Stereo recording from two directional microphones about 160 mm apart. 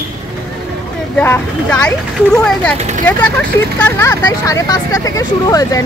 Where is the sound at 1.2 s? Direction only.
15° left (ahead or behind).